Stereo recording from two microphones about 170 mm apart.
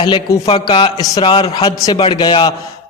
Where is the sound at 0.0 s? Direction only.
25° left (ahead or behind).